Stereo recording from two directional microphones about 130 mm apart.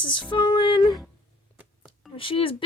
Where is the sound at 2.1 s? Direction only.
45° left (ahead or behind).